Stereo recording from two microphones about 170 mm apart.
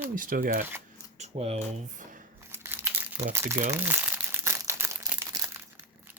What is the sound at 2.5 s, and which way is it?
Crumpling, 15° right (ahead or behind).